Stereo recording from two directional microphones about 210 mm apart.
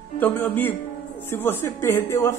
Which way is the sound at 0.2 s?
10° left (ahead or behind).